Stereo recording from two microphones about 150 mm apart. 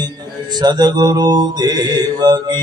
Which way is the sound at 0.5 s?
30° right (ahead or behind).